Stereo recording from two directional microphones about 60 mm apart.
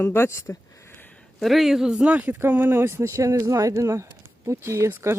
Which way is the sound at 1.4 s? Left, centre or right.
Centre.